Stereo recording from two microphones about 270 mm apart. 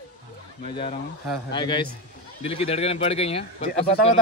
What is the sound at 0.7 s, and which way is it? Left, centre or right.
A man's voice, centre.